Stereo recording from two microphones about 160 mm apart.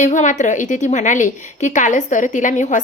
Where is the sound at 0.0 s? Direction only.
50° left (ahead or behind).